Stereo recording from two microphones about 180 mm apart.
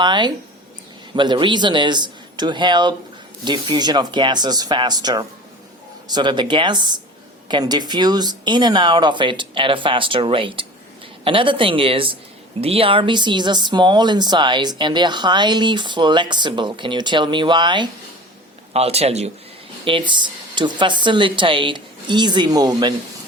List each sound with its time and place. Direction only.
0.0 s speech: 25° right (ahead or behind)